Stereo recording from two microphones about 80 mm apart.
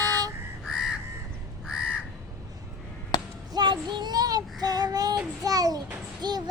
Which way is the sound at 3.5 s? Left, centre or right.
Right.